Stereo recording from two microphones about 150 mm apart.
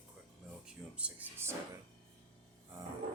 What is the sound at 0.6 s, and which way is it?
Music, 10° right (ahead or behind).